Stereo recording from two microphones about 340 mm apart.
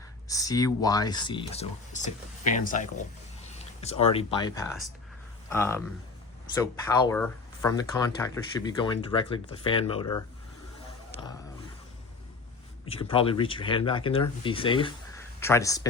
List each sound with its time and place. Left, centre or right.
0.3 s speech: centre
11.1 s a sound: centre
12.8 s speech: centre